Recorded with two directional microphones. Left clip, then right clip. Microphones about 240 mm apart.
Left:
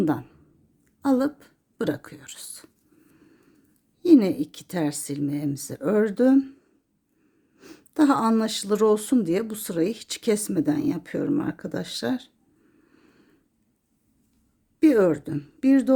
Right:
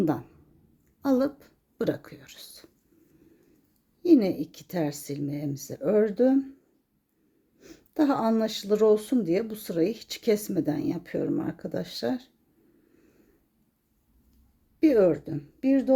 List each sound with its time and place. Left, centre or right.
0.0 s speech: centre
4.0 s speech: centre
7.6 s speech: centre
14.8 s a woman's voice: centre